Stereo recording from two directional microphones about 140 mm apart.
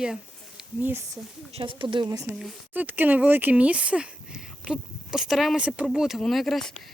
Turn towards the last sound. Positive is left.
turn(degrees=5)  # may be behind; listen again after turning